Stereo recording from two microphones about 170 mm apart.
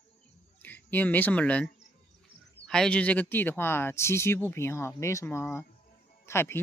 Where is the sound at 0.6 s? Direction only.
10° left (ahead or behind).